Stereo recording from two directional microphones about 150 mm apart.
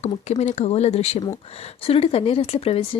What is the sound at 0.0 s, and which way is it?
Speech, 50° left (ahead or behind).